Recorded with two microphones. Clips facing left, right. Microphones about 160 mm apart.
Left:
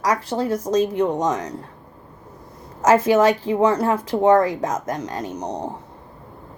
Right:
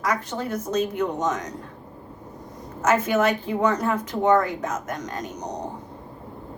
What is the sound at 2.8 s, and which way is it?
Speech, 35° left (ahead or behind).